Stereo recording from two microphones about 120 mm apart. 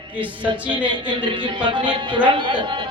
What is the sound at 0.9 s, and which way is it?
Speech, 40° right (ahead or behind).